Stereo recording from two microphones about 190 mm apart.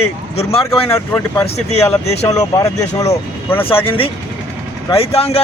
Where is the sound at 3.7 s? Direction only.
30° left (ahead or behind).